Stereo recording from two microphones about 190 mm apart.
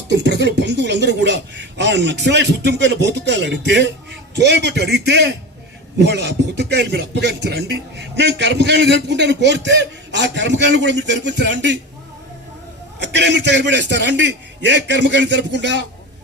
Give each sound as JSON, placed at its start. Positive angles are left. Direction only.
{"t": 0.1, "sound": "speech", "side_deg": -65}
{"t": 13.0, "sound": "a man's voice", "side_deg": -65}